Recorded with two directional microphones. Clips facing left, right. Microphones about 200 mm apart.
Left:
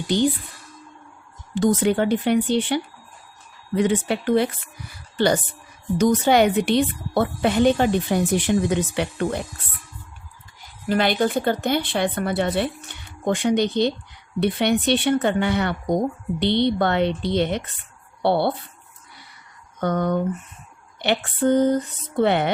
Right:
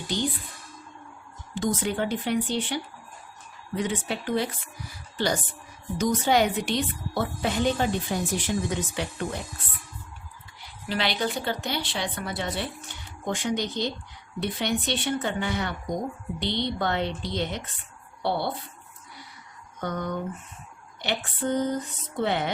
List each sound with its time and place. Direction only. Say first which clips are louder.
1.5 s a woman's voice: left 8 dB; 65° left (ahead or behind)
10.6 s a woman's voice: left 8 dB; 50° left (ahead or behind)
19.8 s a woman's voice: left 8 dB; 65° left (ahead or behind)